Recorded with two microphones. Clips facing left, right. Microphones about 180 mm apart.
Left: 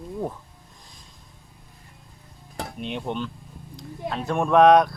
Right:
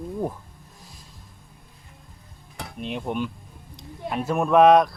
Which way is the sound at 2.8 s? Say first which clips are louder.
Right 2 dB; centre (ahead or behind).